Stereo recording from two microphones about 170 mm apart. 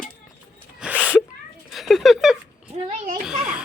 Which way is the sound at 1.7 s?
Centre (ahead or behind).